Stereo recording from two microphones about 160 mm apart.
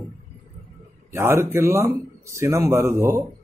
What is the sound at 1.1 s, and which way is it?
Speech, 15° right (ahead or behind).